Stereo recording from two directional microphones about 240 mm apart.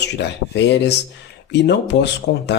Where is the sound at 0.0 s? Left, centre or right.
Left.